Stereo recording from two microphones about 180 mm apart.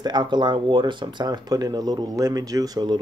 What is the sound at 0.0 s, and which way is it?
Speech, 25° right (ahead or behind).